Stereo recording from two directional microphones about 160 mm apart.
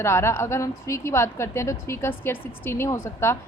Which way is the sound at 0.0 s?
15° left (ahead or behind).